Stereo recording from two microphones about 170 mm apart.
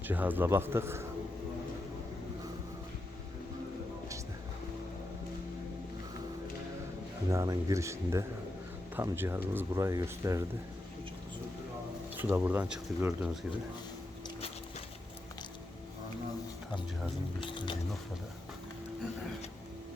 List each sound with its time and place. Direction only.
0.0 s speech: 10° right (ahead or behind)
7.3 s speech: 20° right (ahead or behind)
12.1 s speech: 10° right (ahead or behind)
17.4 s a sound: 30° left (ahead or behind)